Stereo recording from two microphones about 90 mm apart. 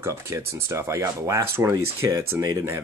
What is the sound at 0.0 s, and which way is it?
Speech, 30° right (ahead or behind).